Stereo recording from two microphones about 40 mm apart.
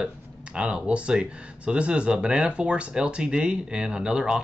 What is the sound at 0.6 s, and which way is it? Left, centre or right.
Speech, right.